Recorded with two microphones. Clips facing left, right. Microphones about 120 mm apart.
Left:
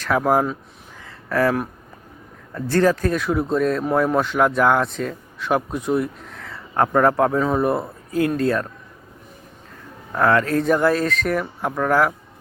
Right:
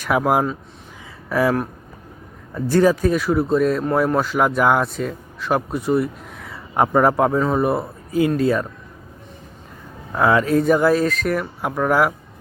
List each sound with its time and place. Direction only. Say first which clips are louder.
0.0 s speech: even; 10° right (ahead or behind)
10.1 s speech: right 1 dB; 10° right (ahead or behind)